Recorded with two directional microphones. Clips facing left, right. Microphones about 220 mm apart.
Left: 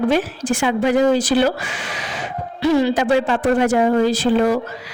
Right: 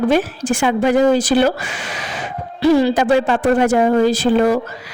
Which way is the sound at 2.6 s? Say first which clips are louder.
Right 3 dB; 35° right (ahead or behind).